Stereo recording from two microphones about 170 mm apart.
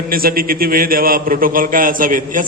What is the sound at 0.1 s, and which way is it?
A man's voice, 60° right (ahead or behind).